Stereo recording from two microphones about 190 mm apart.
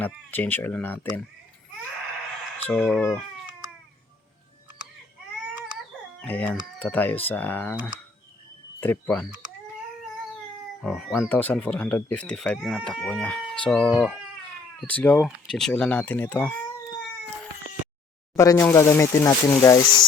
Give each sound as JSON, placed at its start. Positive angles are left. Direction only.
{"t": 0.0, "sound": "speech", "side_deg": 10}
{"t": 2.6, "sound": "speech", "side_deg": 5}
{"t": 6.2, "sound": "speech", "side_deg": 10}
{"t": 8.8, "sound": "speech", "side_deg": 10}
{"t": 10.8, "sound": "speech", "side_deg": 0}
{"t": 18.3, "sound": "speech", "side_deg": 15}